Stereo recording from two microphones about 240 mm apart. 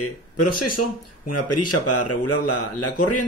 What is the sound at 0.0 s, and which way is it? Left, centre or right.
Speech, left.